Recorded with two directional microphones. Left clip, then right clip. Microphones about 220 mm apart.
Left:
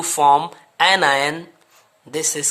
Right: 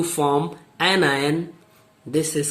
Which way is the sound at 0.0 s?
35° left (ahead or behind).